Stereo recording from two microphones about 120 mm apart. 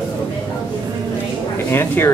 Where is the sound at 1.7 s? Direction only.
20° left (ahead or behind).